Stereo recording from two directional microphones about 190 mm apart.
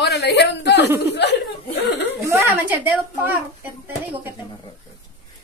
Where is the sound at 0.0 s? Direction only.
60° left (ahead or behind).